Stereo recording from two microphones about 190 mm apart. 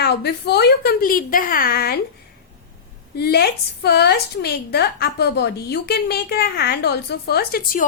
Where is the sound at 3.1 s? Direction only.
55° left (ahead or behind).